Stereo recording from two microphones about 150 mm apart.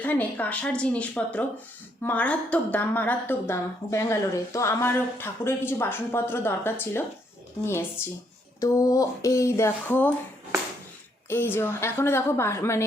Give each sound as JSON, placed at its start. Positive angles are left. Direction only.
{"t": 0.0, "sound": "a woman's voice", "side_deg": 10}
{"t": 8.6, "sound": "a sound", "side_deg": 20}
{"t": 11.3, "sound": "a woman's voice", "side_deg": 15}